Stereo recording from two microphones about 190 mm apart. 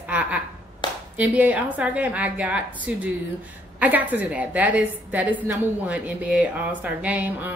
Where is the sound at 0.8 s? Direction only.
25° left (ahead or behind).